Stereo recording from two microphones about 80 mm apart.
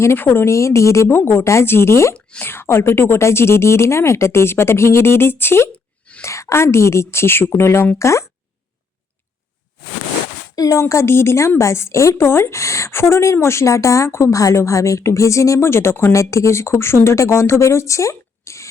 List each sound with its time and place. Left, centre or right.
0.0 s a woman's voice: left
10.5 s a woman's voice: left